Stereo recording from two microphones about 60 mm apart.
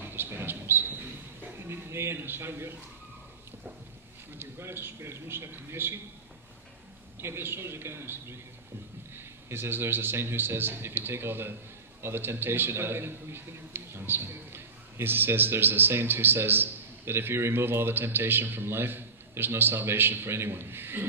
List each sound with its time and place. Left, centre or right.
0.0 s bird: right
1.6 s a man's voice: right
4.4 s a man's voice: right
7.2 s a man's voice: right